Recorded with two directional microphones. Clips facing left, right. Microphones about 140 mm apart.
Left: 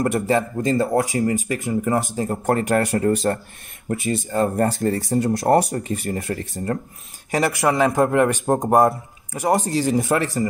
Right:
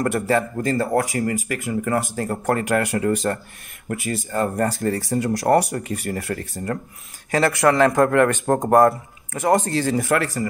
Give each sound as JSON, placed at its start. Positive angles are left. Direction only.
{"t": 0.0, "sound": "a man's voice", "side_deg": 20}